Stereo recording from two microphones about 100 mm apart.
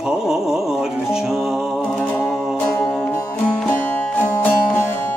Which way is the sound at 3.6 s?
20° left (ahead or behind).